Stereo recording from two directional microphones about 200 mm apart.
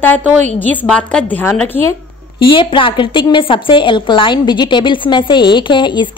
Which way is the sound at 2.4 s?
25° left (ahead or behind).